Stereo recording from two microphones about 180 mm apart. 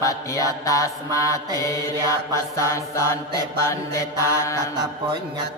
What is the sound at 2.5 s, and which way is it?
Music, 15° left (ahead or behind).